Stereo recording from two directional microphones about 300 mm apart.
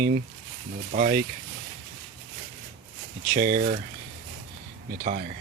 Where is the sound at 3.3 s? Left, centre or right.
Right.